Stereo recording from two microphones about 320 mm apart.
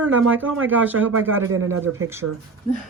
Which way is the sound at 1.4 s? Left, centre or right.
Right.